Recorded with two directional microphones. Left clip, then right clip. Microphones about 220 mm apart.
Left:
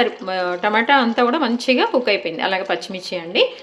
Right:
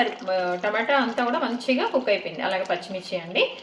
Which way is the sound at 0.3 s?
45° left (ahead or behind).